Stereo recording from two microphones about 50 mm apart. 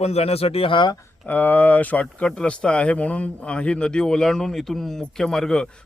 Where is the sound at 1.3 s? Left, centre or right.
Left; by 5.7 s centre.